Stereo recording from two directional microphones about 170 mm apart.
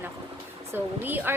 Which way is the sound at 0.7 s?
10° right (ahead or behind).